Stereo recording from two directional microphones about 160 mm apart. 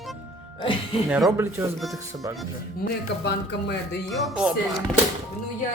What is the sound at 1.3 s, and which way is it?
Speech, 15° right (ahead or behind).